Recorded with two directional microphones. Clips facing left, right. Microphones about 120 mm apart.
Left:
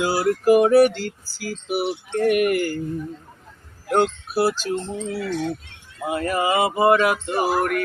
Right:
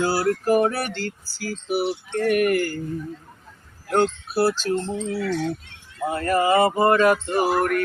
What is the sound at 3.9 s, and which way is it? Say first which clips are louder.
Speech: left 1 dB; 15° left (ahead or behind).